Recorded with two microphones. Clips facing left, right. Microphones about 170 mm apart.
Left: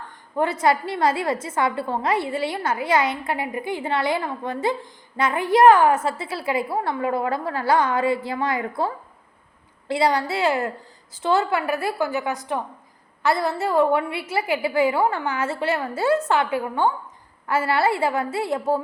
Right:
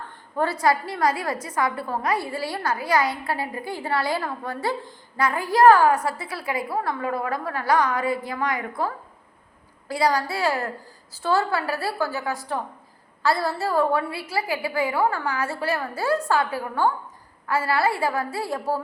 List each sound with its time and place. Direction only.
0.3 s a woman's voice: 20° left (ahead or behind)
9.9 s a woman's voice: 25° left (ahead or behind)